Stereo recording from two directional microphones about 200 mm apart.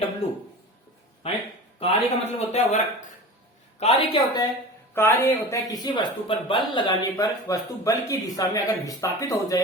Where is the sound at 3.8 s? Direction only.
30° left (ahead or behind).